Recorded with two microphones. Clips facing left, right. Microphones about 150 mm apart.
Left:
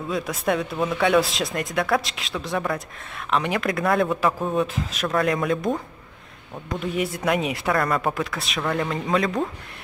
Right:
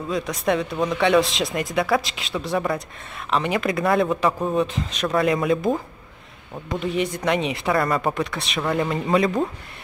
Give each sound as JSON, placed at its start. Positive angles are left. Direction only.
{"t": 0.1, "sound": "speech", "side_deg": 0}